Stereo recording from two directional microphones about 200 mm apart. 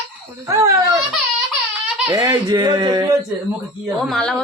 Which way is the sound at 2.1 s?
20° right (ahead or behind).